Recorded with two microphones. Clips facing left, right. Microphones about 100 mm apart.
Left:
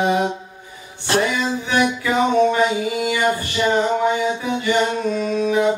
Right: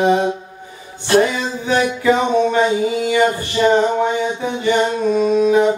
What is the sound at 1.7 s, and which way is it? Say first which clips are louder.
Music: right 5 dB; 35° right (ahead or behind).